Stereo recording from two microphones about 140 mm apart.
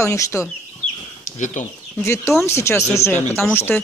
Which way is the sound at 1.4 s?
60° left (ahead or behind).